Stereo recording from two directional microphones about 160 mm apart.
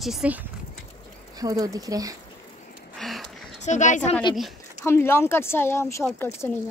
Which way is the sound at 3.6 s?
50° left (ahead or behind).